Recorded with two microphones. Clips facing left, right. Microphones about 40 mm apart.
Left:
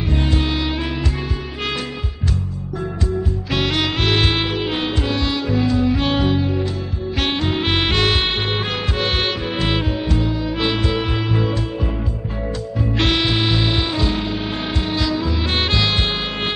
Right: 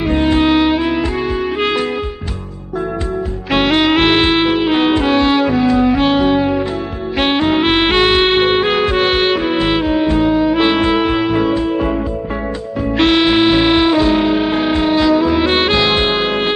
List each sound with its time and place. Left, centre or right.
0.1 s music: right
3.5 s music: right
6.0 s music: centre
6.3 s music: right; by 9.9 s centre
9.9 s music: right
12.9 s music: centre